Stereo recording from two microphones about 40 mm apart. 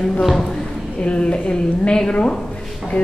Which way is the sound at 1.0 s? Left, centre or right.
Left.